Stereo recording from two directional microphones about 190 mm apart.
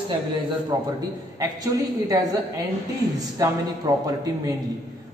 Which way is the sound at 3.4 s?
20° right (ahead or behind).